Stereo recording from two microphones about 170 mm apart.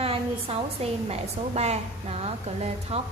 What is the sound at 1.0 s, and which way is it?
A woman's voice, 40° right (ahead or behind).